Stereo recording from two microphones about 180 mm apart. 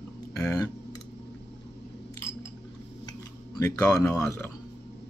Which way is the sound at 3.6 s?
15° left (ahead or behind).